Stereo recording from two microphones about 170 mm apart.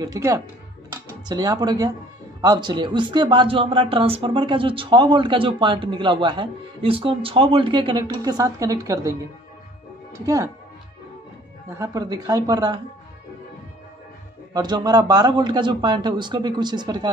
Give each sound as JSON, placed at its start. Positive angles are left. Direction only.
{"t": 0.0, "sound": "speech", "side_deg": -20}
{"t": 10.2, "sound": "speech", "side_deg": -20}
{"t": 11.7, "sound": "speech", "side_deg": -20}
{"t": 14.5, "sound": "speech", "side_deg": -25}